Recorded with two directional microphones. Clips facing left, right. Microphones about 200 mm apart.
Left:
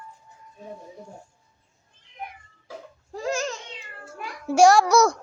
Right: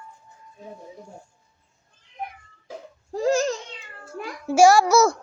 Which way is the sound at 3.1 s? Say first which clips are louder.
Right 7 dB; 35° right (ahead or behind).